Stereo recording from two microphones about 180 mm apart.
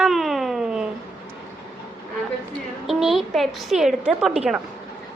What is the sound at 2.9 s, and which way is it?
A woman's voice, centre (ahead or behind).